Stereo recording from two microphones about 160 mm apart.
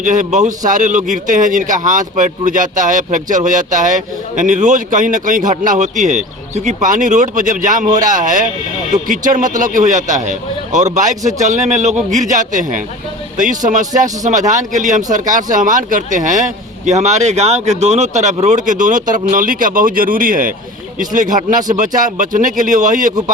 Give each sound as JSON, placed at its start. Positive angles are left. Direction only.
{"t": 0.0, "sound": "a man's voice", "side_deg": -50}